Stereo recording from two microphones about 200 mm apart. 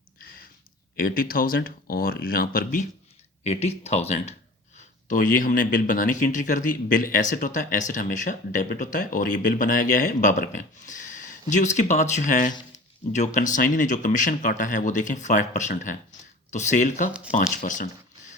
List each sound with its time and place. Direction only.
0.9 s speech: 45° left (ahead or behind)
3.4 s speech: 30° left (ahead or behind)
17.1 s speech: 5° right (ahead or behind)
17.3 s speech: 40° left (ahead or behind)